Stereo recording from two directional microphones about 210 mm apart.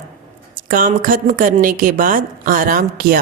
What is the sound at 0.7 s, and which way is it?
Speech, 40° right (ahead or behind).